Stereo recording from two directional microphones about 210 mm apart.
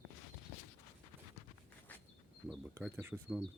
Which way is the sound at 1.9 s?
10° left (ahead or behind).